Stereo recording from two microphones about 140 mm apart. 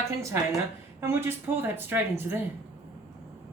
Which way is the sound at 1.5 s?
15° right (ahead or behind).